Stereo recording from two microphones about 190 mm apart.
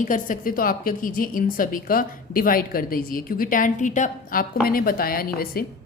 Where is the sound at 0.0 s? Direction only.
45° left (ahead or behind).